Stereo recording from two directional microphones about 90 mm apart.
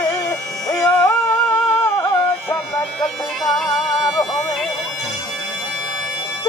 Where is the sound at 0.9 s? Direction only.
25° left (ahead or behind).